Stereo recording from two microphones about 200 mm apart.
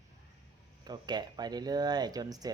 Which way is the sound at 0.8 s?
20° right (ahead or behind).